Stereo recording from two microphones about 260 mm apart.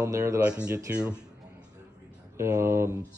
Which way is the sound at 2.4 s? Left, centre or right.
Centre.